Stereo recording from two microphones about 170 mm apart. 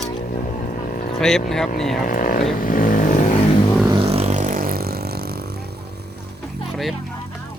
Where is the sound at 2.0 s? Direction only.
55° left (ahead or behind).